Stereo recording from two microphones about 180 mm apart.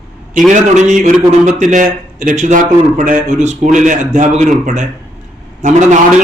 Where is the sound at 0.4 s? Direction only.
45° right (ahead or behind).